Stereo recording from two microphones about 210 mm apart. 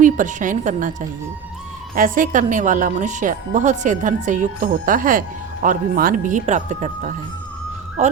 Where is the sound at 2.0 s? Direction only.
40° right (ahead or behind).